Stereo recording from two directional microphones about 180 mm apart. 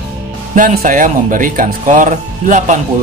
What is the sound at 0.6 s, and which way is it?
Speech, 45° right (ahead or behind).